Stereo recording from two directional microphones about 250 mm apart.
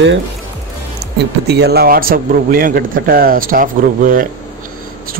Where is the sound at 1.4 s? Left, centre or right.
Right.